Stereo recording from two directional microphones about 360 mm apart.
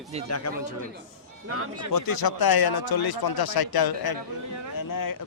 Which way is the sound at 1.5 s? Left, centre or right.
Right.